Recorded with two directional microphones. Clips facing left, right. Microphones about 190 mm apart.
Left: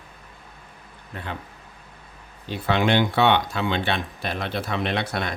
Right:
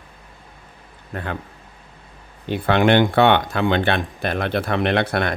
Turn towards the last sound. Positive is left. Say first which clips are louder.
# right 6 dB
turn(degrees=-60)  # may be behind; listen again after turning